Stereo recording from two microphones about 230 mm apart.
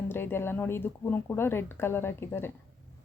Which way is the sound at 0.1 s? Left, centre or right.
Centre.